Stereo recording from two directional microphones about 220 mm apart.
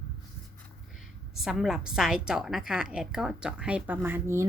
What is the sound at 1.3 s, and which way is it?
A woman's voice, centre (ahead or behind).